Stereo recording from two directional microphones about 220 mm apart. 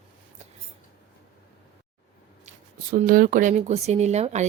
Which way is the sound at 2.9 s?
40° right (ahead or behind).